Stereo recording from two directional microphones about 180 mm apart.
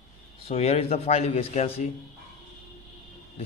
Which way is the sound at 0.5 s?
35° left (ahead or behind).